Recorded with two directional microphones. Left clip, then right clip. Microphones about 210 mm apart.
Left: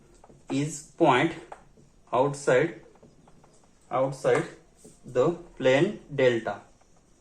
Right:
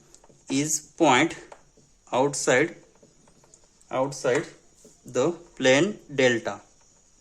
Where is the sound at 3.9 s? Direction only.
55° right (ahead or behind).